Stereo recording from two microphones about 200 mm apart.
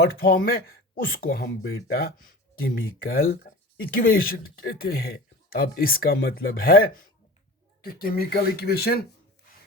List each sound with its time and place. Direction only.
0.0 s speech: 50° left (ahead or behind)